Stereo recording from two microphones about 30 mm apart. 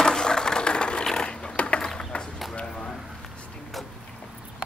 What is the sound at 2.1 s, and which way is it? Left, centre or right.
Run, left.